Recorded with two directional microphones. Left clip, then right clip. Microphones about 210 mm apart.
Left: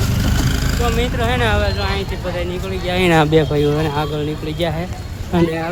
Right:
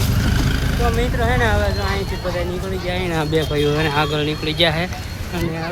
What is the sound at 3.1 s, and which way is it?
Speech, 25° left (ahead or behind).